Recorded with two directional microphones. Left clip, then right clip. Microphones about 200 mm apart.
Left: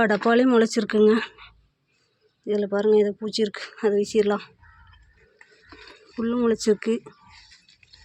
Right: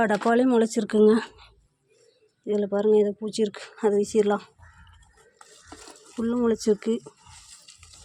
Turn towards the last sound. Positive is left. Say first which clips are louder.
# left 2 dB
turn(degrees=-5)  # may be behind; listen again after turning